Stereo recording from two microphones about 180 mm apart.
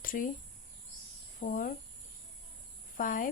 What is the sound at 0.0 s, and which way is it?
Cricket, 50° left (ahead or behind).